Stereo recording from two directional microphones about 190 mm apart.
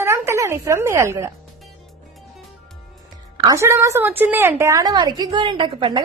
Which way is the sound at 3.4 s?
15° right (ahead or behind).